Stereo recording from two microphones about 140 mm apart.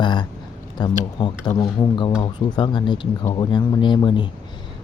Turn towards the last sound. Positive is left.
turn(degrees=35)  # may be behind; listen again after turning